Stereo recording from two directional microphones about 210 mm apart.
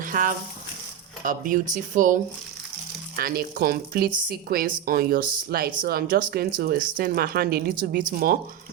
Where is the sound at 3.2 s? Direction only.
45° right (ahead or behind).